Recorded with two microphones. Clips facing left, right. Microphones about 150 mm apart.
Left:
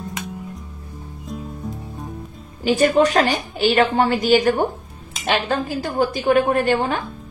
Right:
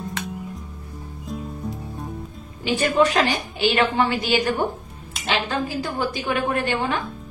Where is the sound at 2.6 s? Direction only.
40° left (ahead or behind).